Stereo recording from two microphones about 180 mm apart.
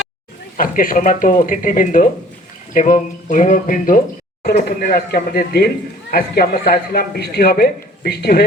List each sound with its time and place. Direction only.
0.5 s a man's voice: 50° left (ahead or behind)